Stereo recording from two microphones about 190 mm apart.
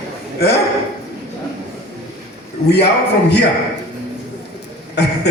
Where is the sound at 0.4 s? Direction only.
60° left (ahead or behind).